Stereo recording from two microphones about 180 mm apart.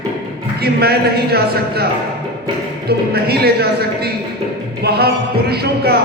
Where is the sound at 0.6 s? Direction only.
60° right (ahead or behind).